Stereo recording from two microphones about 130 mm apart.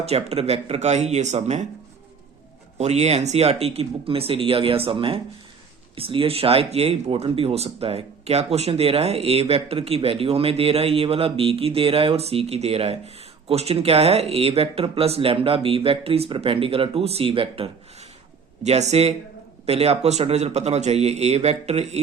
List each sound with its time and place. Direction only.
0.0 s a man's voice: 55° right (ahead or behind)
2.7 s speech: 55° right (ahead or behind)
18.6 s a man's voice: 55° right (ahead or behind)